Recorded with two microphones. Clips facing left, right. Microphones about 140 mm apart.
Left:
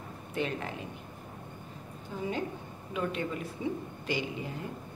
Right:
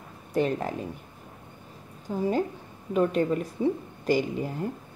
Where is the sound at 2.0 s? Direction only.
40° right (ahead or behind).